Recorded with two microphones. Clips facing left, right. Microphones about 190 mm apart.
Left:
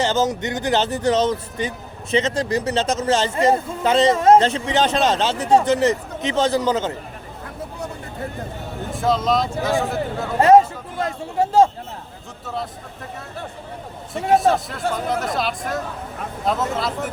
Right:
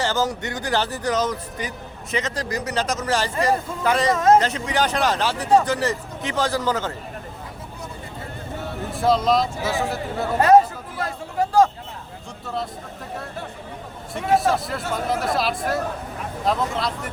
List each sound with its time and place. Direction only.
0.0 s speech: 20° left (ahead or behind)
8.9 s speech: centre (ahead or behind)
11.0 s a sound: 25° left (ahead or behind)
14.1 s speech: centre (ahead or behind)